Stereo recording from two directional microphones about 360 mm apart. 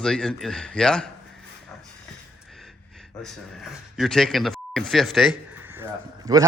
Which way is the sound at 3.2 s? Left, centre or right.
Centre.